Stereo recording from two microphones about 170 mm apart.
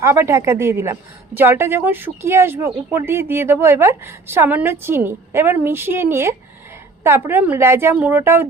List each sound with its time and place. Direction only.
0.0 s speech: 15° right (ahead or behind)